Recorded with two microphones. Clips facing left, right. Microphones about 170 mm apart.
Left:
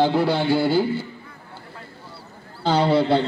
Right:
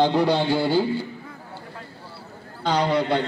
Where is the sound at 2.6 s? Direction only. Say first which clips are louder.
Left 3 dB; 30° left (ahead or behind).